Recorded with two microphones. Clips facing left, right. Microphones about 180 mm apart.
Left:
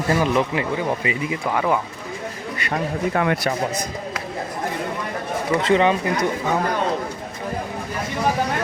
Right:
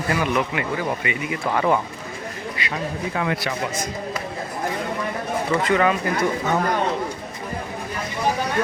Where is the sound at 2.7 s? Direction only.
55° left (ahead or behind).